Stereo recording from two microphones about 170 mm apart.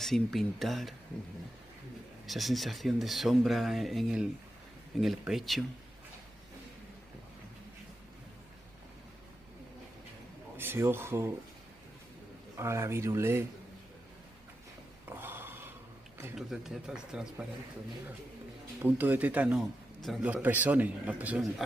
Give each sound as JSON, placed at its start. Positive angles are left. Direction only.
{"t": 0.0, "sound": "speech", "side_deg": 0}
{"t": 2.2, "sound": "speech", "side_deg": 0}
{"t": 10.6, "sound": "a man's voice", "side_deg": -15}
{"t": 12.5, "sound": "a man's voice", "side_deg": -15}
{"t": 15.0, "sound": "filing", "side_deg": -15}
{"t": 16.3, "sound": "speech", "side_deg": 0}
{"t": 18.8, "sound": "a man's voice", "side_deg": -10}